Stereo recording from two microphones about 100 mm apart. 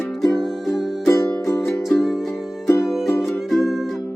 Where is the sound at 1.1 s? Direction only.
30° left (ahead or behind).